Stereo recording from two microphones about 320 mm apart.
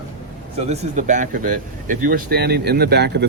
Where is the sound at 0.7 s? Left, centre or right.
Right.